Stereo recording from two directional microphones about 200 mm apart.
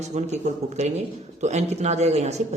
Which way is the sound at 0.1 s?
35° right (ahead or behind).